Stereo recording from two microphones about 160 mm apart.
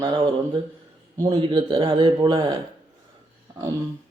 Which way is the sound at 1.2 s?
30° right (ahead or behind).